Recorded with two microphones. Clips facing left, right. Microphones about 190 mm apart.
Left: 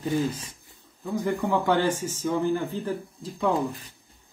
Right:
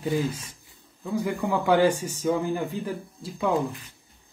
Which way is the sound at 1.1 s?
10° right (ahead or behind).